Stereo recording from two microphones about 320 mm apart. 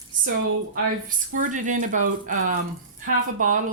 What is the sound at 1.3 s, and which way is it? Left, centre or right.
Speech, right.